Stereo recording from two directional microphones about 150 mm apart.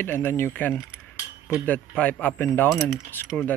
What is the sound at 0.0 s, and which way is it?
Speech, 15° left (ahead or behind).